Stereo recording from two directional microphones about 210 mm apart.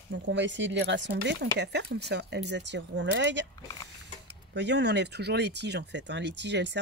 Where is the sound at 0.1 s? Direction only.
60° right (ahead or behind).